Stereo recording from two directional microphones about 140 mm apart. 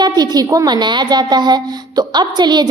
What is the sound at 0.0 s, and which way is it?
Speech, 30° right (ahead or behind).